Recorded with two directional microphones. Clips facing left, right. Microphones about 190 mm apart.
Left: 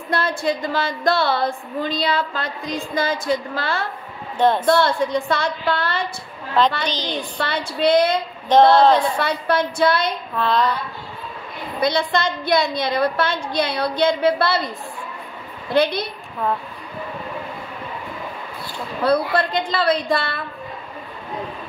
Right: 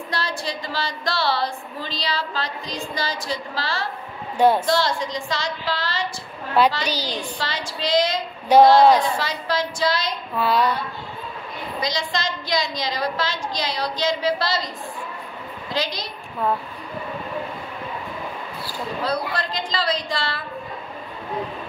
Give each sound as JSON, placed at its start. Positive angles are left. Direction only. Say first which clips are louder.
{"t": 0.1, "sound": "a woman's voice", "louder": "left 8 dB", "side_deg": 50}
{"t": 4.4, "sound": "speech", "louder": "right 1 dB", "side_deg": -10}
{"t": 4.6, "sound": "a woman's voice", "louder": "left 5 dB", "side_deg": 55}
{"t": 6.8, "sound": "speech", "louder": "left 1 dB", "side_deg": -10}
{"t": 7.3, "sound": "a woman's voice", "louder": "left 5 dB", "side_deg": 60}
{"t": 8.5, "sound": "speech", "louder": "even", "side_deg": -10}
{"t": 9.2, "sound": "a woman's voice", "louder": "left 5 dB", "side_deg": 60}
{"t": 10.3, "sound": "speech", "louder": "even", "side_deg": -10}
{"t": 11.8, "sound": "a woman's voice", "louder": "left 7 dB", "side_deg": 60}
{"t": 15.7, "sound": "a woman's voice", "louder": "left 9 dB", "side_deg": 60}
{"t": 19.0, "sound": "a woman's voice", "louder": "left 9 dB", "side_deg": 60}